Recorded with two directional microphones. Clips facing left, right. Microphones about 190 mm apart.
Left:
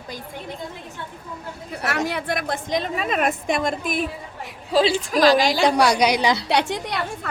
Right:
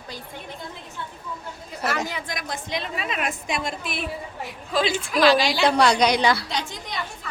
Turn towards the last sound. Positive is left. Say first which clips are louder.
# left 8 dB
turn(degrees=70)  # may be behind; listen again after turning